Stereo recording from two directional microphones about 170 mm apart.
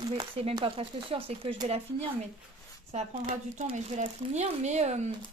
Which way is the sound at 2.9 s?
40° right (ahead or behind).